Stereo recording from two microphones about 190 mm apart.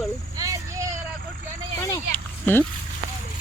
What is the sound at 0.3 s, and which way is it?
Vehicle, 15° right (ahead or behind).